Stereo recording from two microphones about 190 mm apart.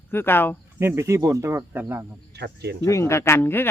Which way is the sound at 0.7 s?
15° right (ahead or behind).